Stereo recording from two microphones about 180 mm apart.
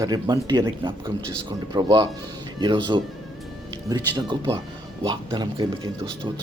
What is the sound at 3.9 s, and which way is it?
Speech, 25° right (ahead or behind).